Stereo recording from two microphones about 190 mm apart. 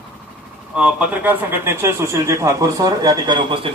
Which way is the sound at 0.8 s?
5° right (ahead or behind).